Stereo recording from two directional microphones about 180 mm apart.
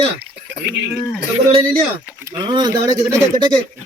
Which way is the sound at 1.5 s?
30° right (ahead or behind).